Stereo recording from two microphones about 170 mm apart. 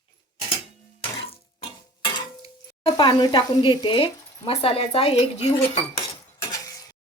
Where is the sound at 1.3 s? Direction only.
30° left (ahead or behind).